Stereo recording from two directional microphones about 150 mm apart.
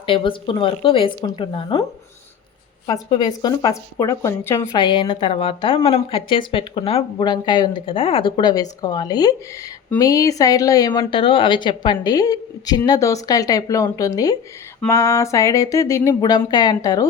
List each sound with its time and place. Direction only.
0.0 s a woman's voice: 35° left (ahead or behind)
2.8 s a woman's voice: 25° left (ahead or behind)
4.7 s a woman's voice: 30° left (ahead or behind)